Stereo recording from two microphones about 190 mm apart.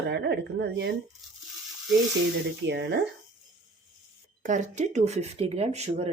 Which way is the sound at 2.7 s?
65° right (ahead or behind).